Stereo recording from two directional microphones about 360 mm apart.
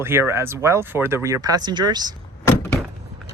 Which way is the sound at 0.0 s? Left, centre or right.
Centre.